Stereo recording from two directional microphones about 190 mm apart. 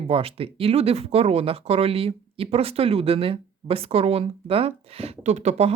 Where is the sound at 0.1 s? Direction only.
30° right (ahead or behind).